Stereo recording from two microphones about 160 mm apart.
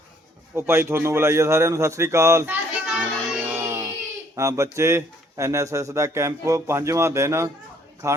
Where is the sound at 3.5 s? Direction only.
15° right (ahead or behind).